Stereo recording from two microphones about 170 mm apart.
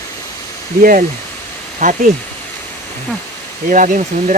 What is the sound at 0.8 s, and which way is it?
Speech, 55° right (ahead or behind).